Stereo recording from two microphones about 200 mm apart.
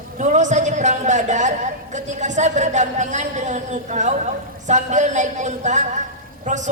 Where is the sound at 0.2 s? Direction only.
35° right (ahead or behind).